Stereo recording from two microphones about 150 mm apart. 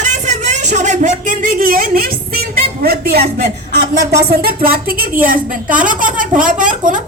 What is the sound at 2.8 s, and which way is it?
A man's voice, 90° right.